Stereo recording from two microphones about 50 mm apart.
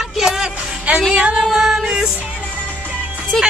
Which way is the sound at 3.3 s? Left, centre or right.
Centre.